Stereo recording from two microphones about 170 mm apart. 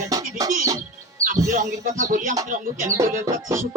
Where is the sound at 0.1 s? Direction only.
20° right (ahead or behind).